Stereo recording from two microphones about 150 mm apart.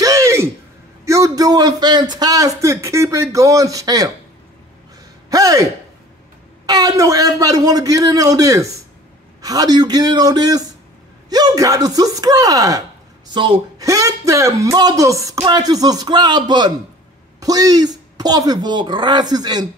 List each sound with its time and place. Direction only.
0.0 s a sound: 20° right (ahead or behind)
1.0 s a man's voice: 20° right (ahead or behind)
5.3 s a man's voice: 25° right (ahead or behind)
13.3 s speech: 35° right (ahead or behind)
13.7 s a man's voice: 20° right (ahead or behind)